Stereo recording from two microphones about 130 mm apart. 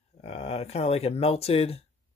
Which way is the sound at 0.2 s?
55° left (ahead or behind).